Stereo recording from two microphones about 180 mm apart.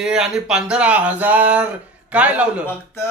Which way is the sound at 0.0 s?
5° right (ahead or behind).